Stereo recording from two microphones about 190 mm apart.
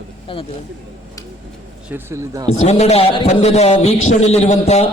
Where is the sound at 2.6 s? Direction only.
35° left (ahead or behind).